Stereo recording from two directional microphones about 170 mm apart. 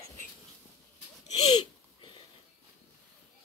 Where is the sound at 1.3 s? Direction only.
25° left (ahead or behind).